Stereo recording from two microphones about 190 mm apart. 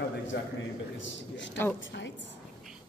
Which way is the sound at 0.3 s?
65° left (ahead or behind).